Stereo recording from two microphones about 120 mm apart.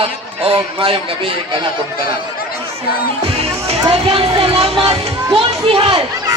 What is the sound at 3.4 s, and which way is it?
Music, 60° right (ahead or behind).